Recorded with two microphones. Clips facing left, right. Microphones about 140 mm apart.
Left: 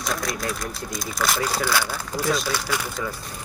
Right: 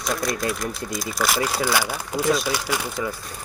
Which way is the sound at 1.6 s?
15° right (ahead or behind).